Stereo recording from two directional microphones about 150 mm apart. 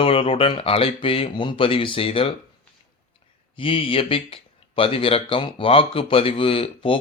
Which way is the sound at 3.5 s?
35° left (ahead or behind).